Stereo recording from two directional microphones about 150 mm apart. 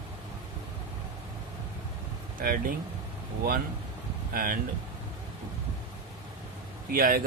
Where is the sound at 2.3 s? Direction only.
70° right (ahead or behind).